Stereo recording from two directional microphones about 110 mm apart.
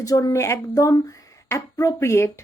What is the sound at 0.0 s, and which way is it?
Speech, 35° left (ahead or behind).